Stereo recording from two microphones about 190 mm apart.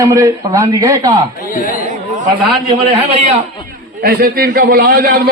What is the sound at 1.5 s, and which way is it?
Chatter, 45° left (ahead or behind).